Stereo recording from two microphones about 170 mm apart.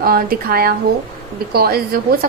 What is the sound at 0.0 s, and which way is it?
A woman's voice, 60° right (ahead or behind).